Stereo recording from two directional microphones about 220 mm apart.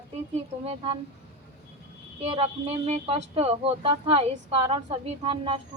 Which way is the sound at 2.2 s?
25° right (ahead or behind).